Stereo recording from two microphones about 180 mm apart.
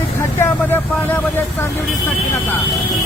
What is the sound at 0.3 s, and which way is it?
Speech, 10° left (ahead or behind).